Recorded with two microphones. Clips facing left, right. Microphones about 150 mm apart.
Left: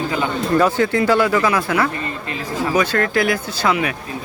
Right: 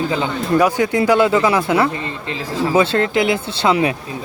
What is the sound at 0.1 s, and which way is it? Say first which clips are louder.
Speech: right 1 dB; 15° right (ahead or behind).